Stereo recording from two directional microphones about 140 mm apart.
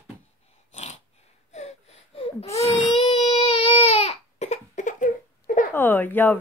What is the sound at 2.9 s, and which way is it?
Baby cry, 40° left (ahead or behind).